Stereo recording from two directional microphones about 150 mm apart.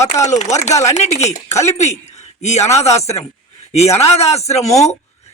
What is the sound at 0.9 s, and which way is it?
A man's voice, 50° left (ahead or behind).